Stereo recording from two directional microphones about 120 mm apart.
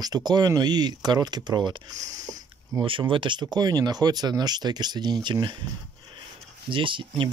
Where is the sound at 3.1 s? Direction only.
45° right (ahead or behind).